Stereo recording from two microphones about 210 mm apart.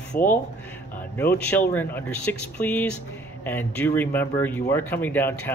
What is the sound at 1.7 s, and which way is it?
Speech, 10° left (ahead or behind).